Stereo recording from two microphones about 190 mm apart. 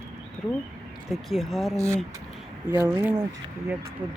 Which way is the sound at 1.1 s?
Centre (ahead or behind).